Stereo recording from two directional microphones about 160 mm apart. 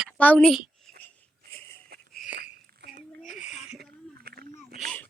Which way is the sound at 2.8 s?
90° right.